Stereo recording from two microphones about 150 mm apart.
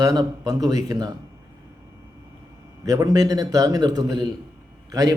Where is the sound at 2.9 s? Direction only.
25° right (ahead or behind).